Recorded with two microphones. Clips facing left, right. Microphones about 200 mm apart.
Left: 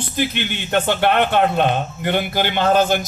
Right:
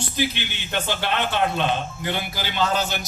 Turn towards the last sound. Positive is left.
turn(degrees=50)  # may be behind; listen again after turning